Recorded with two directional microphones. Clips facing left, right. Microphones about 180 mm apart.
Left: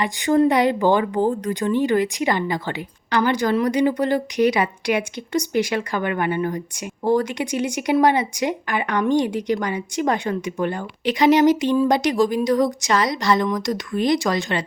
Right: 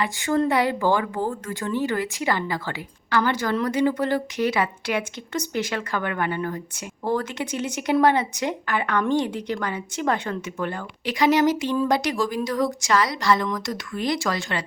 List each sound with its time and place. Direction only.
0.0 s speech: 20° left (ahead or behind)